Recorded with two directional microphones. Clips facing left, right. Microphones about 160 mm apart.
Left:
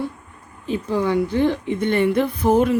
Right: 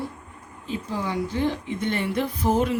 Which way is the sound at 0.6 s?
60° left (ahead or behind).